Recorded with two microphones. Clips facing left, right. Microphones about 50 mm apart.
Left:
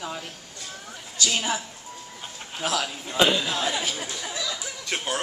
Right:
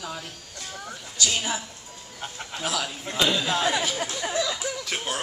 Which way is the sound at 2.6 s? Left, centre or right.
Centre.